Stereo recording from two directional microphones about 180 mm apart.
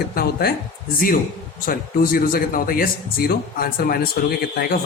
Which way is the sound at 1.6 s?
55° left (ahead or behind).